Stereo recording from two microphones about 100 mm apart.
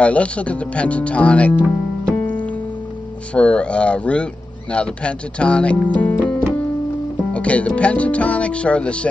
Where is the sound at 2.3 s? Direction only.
15° left (ahead or behind).